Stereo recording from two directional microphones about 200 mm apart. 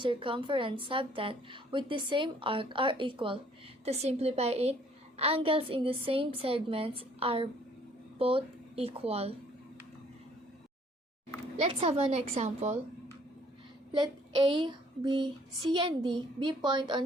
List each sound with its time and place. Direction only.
0.0 s a woman's voice: 25° right (ahead or behind)
11.6 s a woman's voice: 25° right (ahead or behind)
13.9 s child singing: 25° right (ahead or behind)
15.7 s a woman's voice: 20° right (ahead or behind)